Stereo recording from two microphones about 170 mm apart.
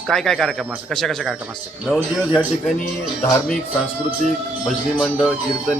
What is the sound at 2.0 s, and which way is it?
Speech, 10° right (ahead or behind).